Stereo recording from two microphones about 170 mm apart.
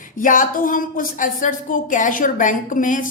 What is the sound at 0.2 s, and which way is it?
A woman's voice, 50° left (ahead or behind).